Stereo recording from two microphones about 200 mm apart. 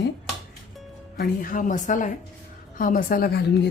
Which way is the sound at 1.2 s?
45° left (ahead or behind).